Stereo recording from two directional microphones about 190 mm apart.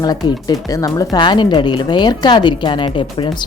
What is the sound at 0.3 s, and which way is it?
Speech, 20° left (ahead or behind).